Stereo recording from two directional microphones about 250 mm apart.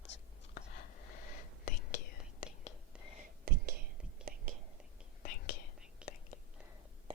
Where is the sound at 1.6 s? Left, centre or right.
Left.